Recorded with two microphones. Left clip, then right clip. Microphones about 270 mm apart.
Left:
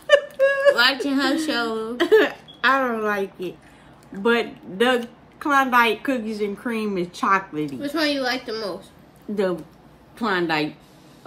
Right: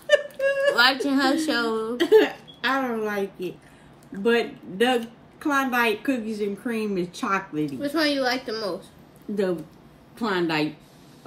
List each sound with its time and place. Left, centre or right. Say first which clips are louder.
0.0 s a sound: left 4 dB; centre
0.7 s a woman's voice: left 1 dB; centre
2.0 s a woman's voice: left 1 dB; centre
7.8 s a woman's voice: even; centre
9.3 s a woman's voice: left 2 dB; centre